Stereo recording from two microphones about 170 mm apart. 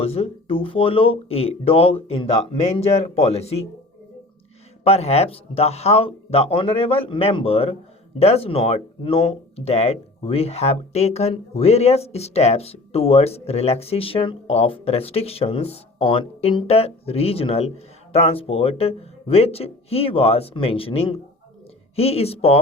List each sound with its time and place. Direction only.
0.0 s speech: 35° left (ahead or behind)
4.8 s speech: 40° left (ahead or behind)